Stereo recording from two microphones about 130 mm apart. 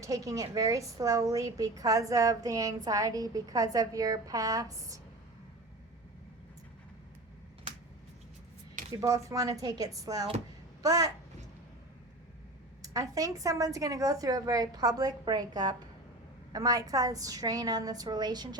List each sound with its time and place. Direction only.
0.0 s a woman's voice: 25° right (ahead or behind)
9.0 s a woman's voice: 25° right (ahead or behind)
12.8 s a woman's voice: 25° right (ahead or behind)